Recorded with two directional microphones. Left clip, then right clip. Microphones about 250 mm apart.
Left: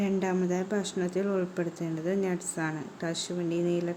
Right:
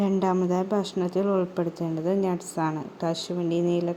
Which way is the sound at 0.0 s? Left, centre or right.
Centre.